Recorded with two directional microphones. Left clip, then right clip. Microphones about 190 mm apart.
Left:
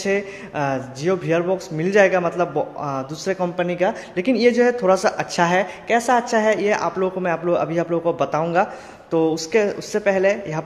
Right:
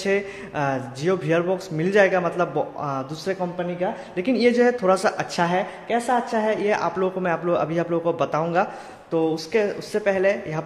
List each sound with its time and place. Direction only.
0.0 s speech: 5° left (ahead or behind)
3.3 s speech: 25° left (ahead or behind)
4.2 s speech: 10° left (ahead or behind)